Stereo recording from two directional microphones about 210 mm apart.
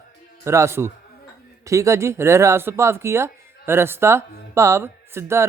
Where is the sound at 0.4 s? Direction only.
15° right (ahead or behind).